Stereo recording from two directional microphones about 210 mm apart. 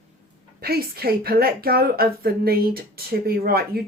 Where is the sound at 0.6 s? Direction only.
45° right (ahead or behind).